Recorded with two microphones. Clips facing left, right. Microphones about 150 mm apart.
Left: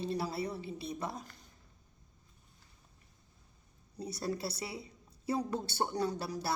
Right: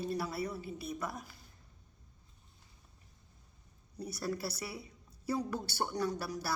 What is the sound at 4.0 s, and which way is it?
A woman's voice, 25° left (ahead or behind).